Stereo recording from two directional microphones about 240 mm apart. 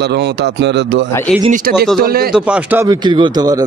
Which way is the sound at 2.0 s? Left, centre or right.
Right.